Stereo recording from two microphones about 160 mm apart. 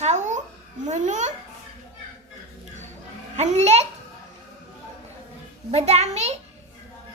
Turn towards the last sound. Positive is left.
turn(degrees=-40)  # may be behind; listen again after turning